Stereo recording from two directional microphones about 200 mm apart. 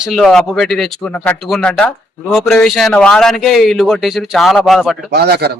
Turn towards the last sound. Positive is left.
turn(degrees=-55)  # may be behind; listen again after turning